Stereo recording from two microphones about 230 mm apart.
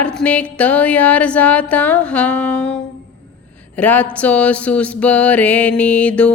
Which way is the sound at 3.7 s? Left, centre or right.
Centre.